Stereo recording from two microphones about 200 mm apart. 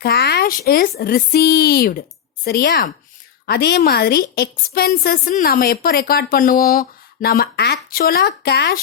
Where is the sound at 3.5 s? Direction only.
55° left (ahead or behind).